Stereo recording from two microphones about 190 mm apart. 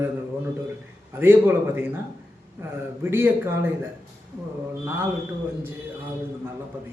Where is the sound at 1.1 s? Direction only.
10° right (ahead or behind).